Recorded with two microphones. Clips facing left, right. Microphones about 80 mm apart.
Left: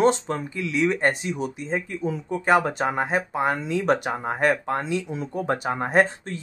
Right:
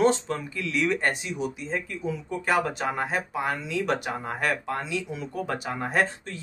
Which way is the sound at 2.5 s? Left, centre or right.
Left.